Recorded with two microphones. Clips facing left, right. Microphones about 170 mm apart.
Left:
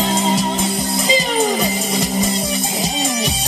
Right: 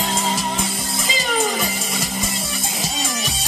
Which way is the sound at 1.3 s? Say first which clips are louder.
Left 4 dB; 20° left (ahead or behind).